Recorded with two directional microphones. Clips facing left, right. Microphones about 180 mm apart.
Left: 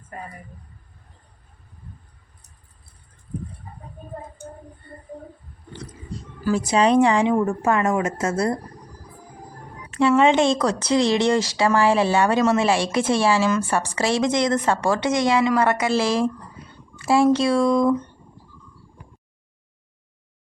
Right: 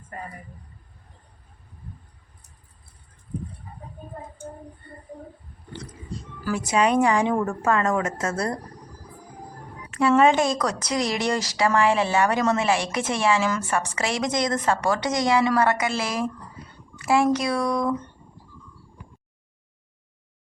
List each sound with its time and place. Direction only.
6.4 s speech: 30° left (ahead or behind)
9.9 s speech: 25° left (ahead or behind)
17.0 s a sound: 30° left (ahead or behind)
17.3 s speech: 25° left (ahead or behind)